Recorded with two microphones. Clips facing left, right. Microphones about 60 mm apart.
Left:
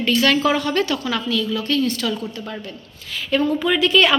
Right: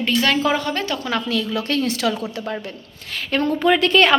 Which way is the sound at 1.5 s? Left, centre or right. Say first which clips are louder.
Left 1 dB; right.